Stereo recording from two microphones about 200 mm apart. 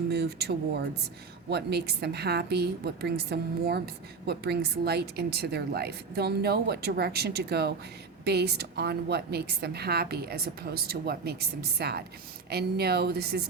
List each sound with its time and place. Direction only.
0.1 s a woman's voice: 55° right (ahead or behind)